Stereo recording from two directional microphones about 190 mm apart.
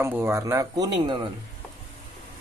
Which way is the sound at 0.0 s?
15° right (ahead or behind).